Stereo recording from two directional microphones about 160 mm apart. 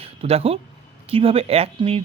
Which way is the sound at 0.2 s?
40° right (ahead or behind).